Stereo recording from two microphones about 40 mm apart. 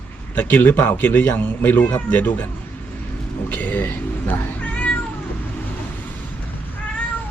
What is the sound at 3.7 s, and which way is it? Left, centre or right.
Speech, left.